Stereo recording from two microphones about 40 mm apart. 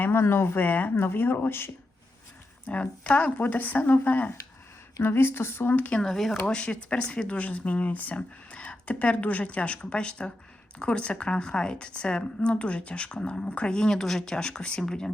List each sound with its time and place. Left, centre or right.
0.0 s speech: left
0.6 s speech: left
0.9 s speech: left
2.8 s speech: left
5.0 s speech: left
5.9 s a woman's voice: centre; by 8.2 s left
8.4 s a sound: left
8.9 s a woman's voice: left; by 15.1 s centre